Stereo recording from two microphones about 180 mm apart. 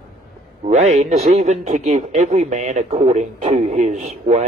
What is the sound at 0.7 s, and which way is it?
A man's voice, 40° right (ahead or behind).